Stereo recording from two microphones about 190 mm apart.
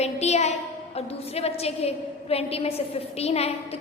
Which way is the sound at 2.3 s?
30° left (ahead or behind).